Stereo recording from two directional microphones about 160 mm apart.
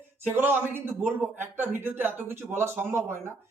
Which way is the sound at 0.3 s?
15° right (ahead or behind).